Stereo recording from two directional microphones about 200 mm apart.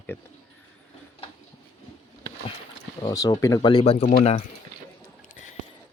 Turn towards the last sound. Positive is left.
turn(degrees=30)  # may be behind; listen again after turning